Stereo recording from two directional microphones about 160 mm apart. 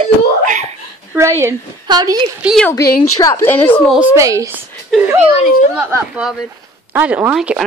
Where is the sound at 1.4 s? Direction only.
25° right (ahead or behind).